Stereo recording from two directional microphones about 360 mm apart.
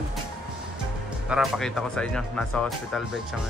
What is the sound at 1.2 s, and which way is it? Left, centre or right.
Speech, centre.